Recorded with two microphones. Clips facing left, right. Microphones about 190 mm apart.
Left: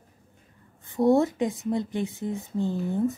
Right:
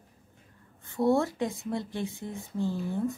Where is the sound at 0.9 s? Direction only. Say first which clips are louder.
Left 4 dB; 20° left (ahead or behind).